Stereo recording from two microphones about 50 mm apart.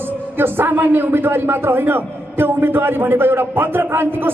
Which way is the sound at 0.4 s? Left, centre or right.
Right.